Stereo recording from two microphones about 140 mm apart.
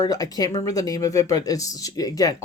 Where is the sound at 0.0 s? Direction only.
25° left (ahead or behind).